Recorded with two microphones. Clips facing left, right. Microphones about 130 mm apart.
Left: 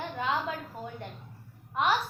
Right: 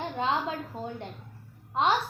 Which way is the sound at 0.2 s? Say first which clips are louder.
Right 2 dB; 30° right (ahead or behind).